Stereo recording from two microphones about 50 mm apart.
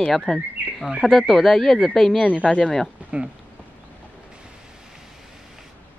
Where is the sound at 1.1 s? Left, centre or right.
Centre.